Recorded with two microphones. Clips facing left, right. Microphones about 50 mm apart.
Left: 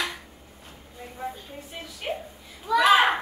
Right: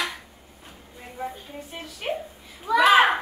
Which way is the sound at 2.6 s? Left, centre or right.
Centre.